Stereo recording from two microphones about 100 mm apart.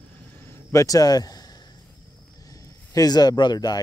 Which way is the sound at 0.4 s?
25° left (ahead or behind).